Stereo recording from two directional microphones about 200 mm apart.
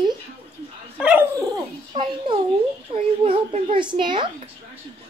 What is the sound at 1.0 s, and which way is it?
A woman's voice, 10° right (ahead or behind).